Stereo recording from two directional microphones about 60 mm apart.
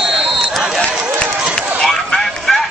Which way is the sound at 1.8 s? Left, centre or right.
Centre.